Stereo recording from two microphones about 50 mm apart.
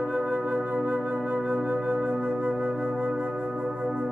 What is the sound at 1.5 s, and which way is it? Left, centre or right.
Flute, right.